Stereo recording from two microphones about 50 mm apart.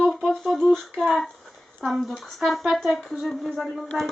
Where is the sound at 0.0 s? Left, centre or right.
Centre.